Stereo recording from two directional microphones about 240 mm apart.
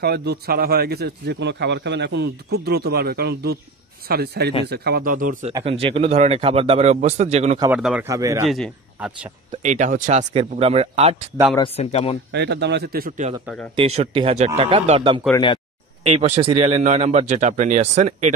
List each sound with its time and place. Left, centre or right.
0.0 s speech: right
5.5 s speech: right
7.6 s speech: centre
8.5 s speech: centre
9.6 s speech: right
11.5 s speech: left
12.3 s speech: right
13.7 s speech: right